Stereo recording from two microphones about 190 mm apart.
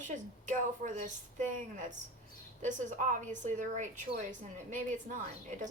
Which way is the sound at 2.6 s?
40° right (ahead or behind).